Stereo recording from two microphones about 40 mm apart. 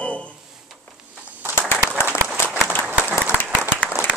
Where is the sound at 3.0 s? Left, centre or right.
Right.